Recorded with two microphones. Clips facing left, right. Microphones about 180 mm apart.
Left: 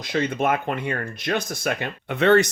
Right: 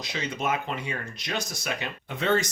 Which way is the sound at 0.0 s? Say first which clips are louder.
Left 8 dB; 55° left (ahead or behind).